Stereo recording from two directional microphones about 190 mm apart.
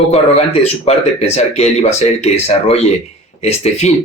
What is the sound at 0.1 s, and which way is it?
Speech, 35° left (ahead or behind).